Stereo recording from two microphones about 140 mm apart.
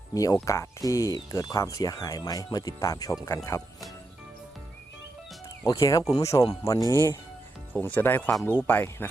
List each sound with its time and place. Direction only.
0.1 s speech: 25° left (ahead or behind)
5.6 s speech: 25° left (ahead or behind)